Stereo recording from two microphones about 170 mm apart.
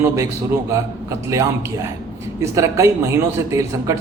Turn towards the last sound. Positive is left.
turn(degrees=-20)  # may be behind; listen again after turning